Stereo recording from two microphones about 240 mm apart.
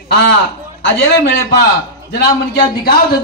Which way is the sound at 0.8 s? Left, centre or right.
Left.